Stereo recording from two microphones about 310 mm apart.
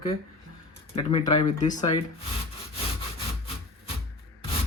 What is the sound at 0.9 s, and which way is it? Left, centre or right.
Speech, left.